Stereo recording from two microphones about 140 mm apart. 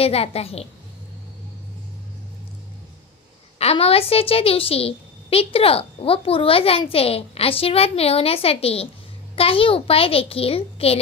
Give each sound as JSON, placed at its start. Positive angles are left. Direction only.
{"t": 0.0, "sound": "a woman's voice", "side_deg": 45}
{"t": 3.5, "sound": "a woman's voice", "side_deg": 45}